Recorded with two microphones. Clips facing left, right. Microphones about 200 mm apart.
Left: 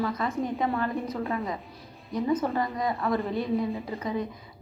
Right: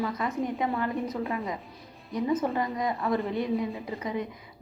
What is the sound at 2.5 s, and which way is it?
Speech, 15° right (ahead or behind).